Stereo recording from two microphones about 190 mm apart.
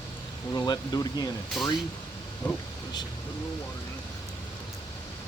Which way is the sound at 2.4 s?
10° left (ahead or behind).